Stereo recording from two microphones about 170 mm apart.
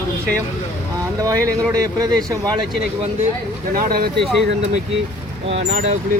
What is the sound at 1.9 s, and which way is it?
Speech, 20° right (ahead or behind).